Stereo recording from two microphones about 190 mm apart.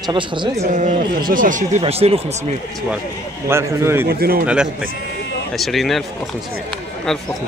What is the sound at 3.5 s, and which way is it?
Speech, 15° right (ahead or behind).